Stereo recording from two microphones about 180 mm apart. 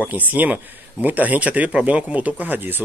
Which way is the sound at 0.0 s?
10° right (ahead or behind).